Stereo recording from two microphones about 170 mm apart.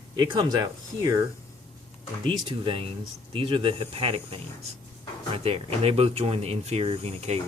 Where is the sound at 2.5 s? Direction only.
30° right (ahead or behind).